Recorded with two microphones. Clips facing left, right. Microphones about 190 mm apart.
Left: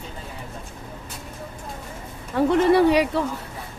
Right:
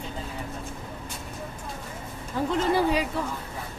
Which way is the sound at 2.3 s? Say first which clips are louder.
Left 7 dB; 65° left (ahead or behind).